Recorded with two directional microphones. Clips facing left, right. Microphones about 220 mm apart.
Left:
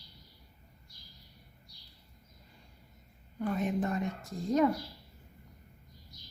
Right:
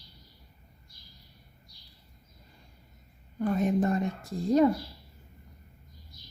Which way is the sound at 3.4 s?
40° right (ahead or behind).